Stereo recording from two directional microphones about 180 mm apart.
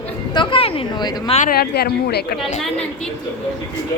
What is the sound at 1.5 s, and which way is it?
Speech, 60° left (ahead or behind).